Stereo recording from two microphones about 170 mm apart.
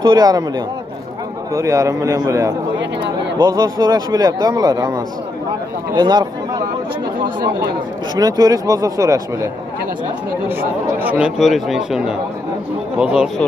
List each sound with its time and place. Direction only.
0.0 s a man's voice: 20° right (ahead or behind)
1.5 s a man's voice: 15° right (ahead or behind)
8.2 s a man's voice: 20° right (ahead or behind)
10.5 s speech: 10° right (ahead or behind)